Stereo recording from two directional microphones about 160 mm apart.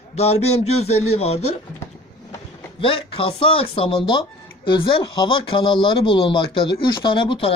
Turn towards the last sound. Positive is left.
turn(degrees=35)  # may be behind; listen again after turning